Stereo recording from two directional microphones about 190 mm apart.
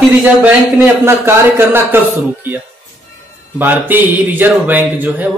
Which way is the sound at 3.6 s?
10° right (ahead or behind).